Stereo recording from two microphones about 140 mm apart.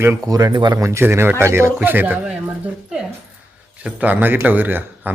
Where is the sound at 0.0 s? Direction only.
20° right (ahead or behind).